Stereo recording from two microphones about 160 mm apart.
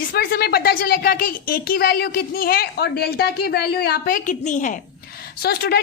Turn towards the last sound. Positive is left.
turn(degrees=75)  # may be behind; listen again after turning